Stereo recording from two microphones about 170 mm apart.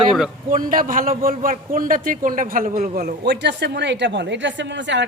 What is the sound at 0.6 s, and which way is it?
A man's voice, 55° right (ahead or behind).